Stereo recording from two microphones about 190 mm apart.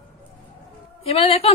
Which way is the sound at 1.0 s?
30° left (ahead or behind).